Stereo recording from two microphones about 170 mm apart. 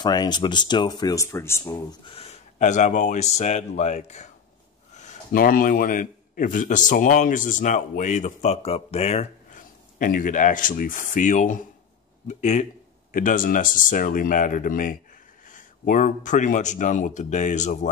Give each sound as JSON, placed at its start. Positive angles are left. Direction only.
{"t": 0.0, "sound": "speech", "side_deg": 25}
{"t": 2.0, "sound": "a man's voice", "side_deg": 35}